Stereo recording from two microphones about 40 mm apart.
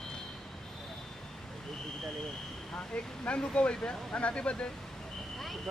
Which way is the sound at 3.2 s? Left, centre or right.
Left.